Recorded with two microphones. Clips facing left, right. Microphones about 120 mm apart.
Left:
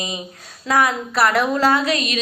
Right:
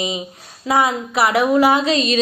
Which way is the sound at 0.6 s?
20° right (ahead or behind).